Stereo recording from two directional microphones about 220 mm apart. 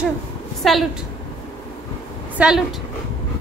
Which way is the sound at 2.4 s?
Centre (ahead or behind).